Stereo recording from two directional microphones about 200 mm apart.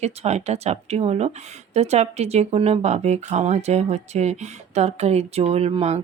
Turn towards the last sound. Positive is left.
turn(degrees=-30)  # may be behind; listen again after turning